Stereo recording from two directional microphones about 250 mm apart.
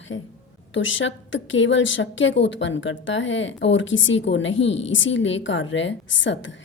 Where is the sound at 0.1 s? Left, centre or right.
Left.